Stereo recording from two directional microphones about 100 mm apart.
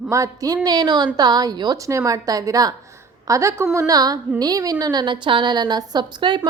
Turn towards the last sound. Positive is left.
turn(degrees=-50)  # may be behind; listen again after turning